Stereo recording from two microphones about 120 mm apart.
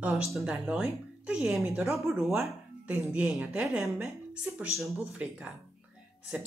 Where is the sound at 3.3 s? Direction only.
5° right (ahead or behind).